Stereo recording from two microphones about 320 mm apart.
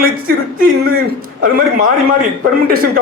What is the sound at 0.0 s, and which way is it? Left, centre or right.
Speech, right.